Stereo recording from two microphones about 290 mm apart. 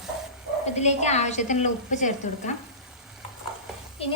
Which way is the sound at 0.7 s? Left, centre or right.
Left.